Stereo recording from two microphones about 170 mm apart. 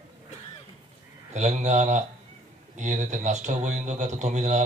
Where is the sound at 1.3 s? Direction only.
40° right (ahead or behind).